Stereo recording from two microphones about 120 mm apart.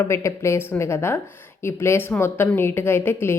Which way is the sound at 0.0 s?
25° left (ahead or behind).